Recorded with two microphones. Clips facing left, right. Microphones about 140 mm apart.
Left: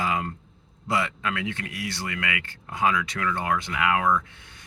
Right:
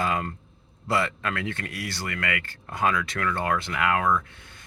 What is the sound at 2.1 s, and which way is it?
Speech, 45° right (ahead or behind).